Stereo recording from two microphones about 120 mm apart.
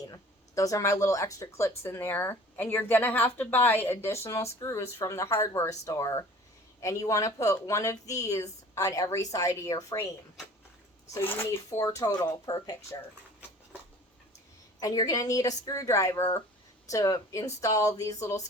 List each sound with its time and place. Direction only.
0.1 s speech: 30° left (ahead or behind)
11.1 s speech: 20° left (ahead or behind)
14.8 s speech: 30° left (ahead or behind)